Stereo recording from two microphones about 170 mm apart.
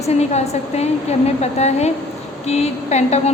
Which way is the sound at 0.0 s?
40° left (ahead or behind).